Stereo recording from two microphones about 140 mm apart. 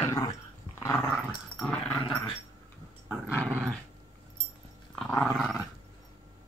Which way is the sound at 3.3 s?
15° right (ahead or behind).